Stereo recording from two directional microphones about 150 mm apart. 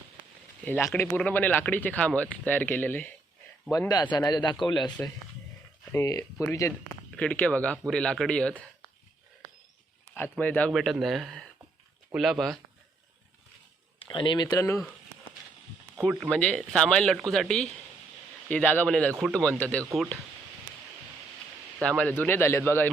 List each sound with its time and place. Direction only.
0.6 s speech: 10° left (ahead or behind)
3.7 s speech: 25° left (ahead or behind)
5.9 s speech: 20° left (ahead or behind)
7.2 s speech: 10° left (ahead or behind)
10.3 s speech: 10° left (ahead or behind)
14.0 s speech: 35° left (ahead or behind)
16.0 s speech: 5° left (ahead or behind)
21.8 s speech: 5° left (ahead or behind)